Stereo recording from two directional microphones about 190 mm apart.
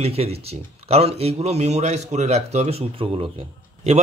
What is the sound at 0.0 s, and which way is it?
A man's voice, 30° right (ahead or behind).